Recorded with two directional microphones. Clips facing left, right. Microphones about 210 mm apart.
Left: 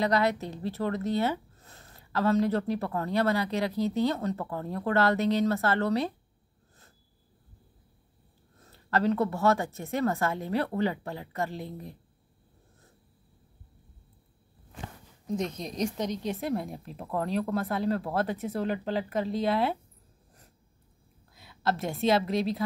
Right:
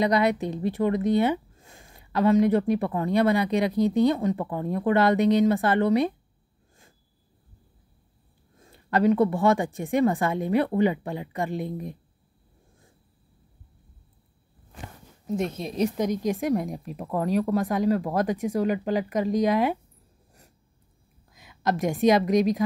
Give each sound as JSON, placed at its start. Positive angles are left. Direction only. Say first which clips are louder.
{"t": 0.0, "sound": "a woman's voice", "louder": "right 4 dB", "side_deg": -15}
{"t": 8.5, "sound": "a woman's voice", "louder": "right 4 dB", "side_deg": -15}
{"t": 15.2, "sound": "a woman's voice", "louder": "right 4 dB", "side_deg": -5}
{"t": 21.3, "sound": "a woman's voice", "louder": "right 3 dB", "side_deg": -15}